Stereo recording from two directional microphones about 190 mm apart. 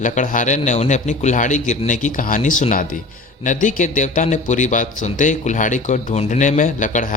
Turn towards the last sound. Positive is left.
turn(degrees=40)  # may be behind; listen again after turning